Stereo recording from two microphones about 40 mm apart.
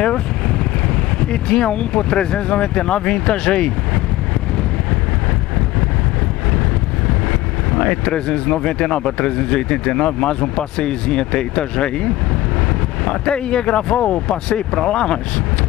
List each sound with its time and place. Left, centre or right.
1.3 s speech: left
7.7 s speech: left